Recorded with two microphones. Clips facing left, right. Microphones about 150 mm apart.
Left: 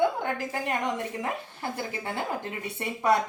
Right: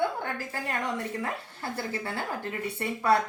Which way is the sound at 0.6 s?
20° left (ahead or behind).